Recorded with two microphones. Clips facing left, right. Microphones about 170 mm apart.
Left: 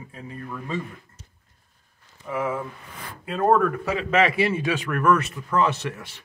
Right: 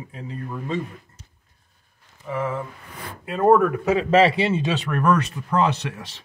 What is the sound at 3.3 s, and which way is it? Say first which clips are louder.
Speech: right 3 dB; 10° right (ahead or behind).